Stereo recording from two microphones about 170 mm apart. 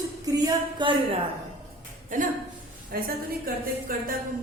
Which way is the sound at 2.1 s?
50° right (ahead or behind).